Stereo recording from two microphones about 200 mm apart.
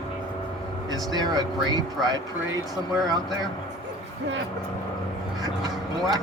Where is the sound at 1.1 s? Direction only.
20° right (ahead or behind).